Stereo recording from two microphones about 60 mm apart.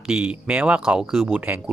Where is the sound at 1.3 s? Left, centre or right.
Right.